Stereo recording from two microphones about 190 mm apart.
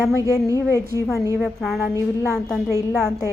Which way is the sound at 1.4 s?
Centre (ahead or behind).